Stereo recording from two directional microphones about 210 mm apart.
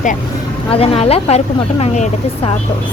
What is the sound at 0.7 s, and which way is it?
Speech, 30° left (ahead or behind).